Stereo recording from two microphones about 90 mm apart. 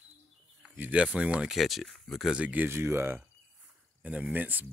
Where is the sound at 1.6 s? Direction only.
Centre (ahead or behind).